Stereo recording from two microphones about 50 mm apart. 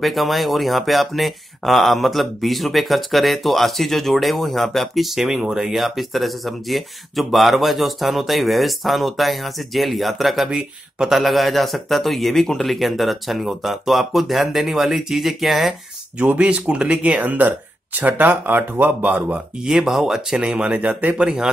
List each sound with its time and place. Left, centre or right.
0.0 s speech: centre
16.3 s speech: right
17.2 s speech: right
19.6 s speech: centre
20.3 s speech: centre
20.7 s speech: right
21.1 s speech: centre